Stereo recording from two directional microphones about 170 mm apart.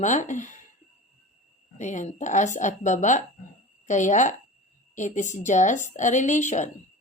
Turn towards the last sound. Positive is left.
turn(degrees=45)  # may be behind; listen again after turning